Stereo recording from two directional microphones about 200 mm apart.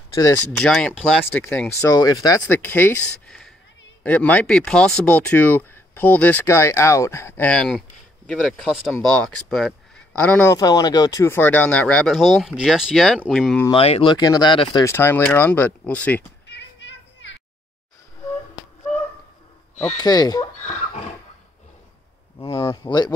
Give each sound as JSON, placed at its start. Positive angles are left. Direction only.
{"t": 0.1, "sound": "speech", "side_deg": 15}
{"t": 13.7, "sound": "speech", "side_deg": 30}
{"t": 16.4, "sound": "children playing", "side_deg": 60}
{"t": 20.0, "sound": "speech", "side_deg": 20}
{"t": 22.4, "sound": "speech", "side_deg": 25}